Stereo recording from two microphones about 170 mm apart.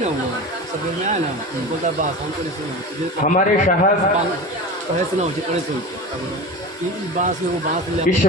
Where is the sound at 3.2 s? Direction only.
50° left (ahead or behind).